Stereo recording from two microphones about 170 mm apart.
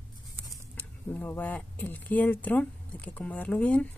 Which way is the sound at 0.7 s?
10° left (ahead or behind).